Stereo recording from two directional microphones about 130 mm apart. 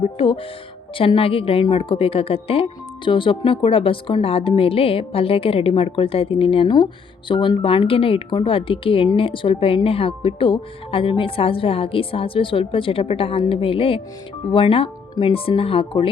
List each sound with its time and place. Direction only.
0.0 s a woman's voice: 45° left (ahead or behind)